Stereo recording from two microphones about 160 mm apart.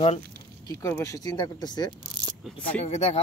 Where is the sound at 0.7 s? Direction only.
20° left (ahead or behind).